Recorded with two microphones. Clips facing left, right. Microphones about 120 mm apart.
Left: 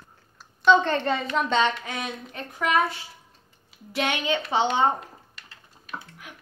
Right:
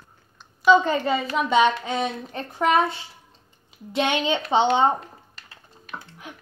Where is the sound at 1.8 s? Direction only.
25° right (ahead or behind).